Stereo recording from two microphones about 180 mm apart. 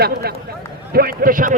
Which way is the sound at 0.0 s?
60° right (ahead or behind).